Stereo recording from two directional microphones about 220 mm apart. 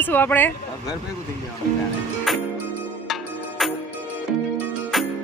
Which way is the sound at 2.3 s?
Centre (ahead or behind).